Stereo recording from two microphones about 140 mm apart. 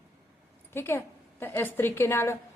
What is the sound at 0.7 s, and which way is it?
A woman's voice, 15° left (ahead or behind).